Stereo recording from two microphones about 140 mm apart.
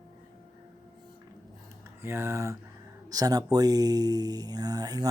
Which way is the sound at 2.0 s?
20° right (ahead or behind).